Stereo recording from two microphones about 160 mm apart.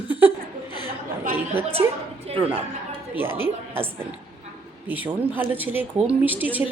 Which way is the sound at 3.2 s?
15° right (ahead or behind).